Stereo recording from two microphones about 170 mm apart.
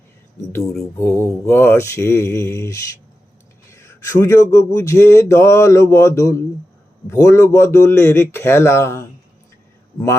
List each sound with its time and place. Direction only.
0.9 s speech: 15° left (ahead or behind)